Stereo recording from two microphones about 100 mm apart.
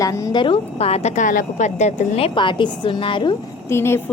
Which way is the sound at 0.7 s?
90° left.